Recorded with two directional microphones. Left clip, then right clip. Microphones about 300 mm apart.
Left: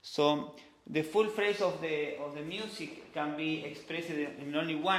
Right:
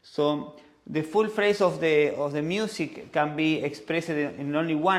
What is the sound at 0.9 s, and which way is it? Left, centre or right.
Speech, right.